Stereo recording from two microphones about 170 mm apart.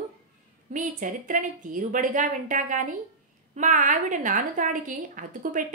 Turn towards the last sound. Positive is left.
turn(degrees=-50)  # may be behind; listen again after turning